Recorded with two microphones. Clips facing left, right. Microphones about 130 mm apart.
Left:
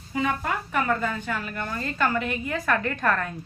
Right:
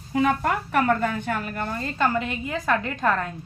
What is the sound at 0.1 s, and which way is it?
A woman's voice, 65° right (ahead or behind).